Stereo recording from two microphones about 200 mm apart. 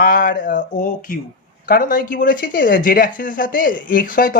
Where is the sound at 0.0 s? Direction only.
45° left (ahead or behind).